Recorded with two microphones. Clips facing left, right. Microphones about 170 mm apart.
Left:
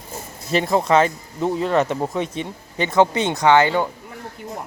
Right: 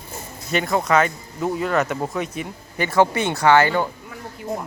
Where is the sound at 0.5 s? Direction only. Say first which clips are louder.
Left 2 dB; 30° left (ahead or behind).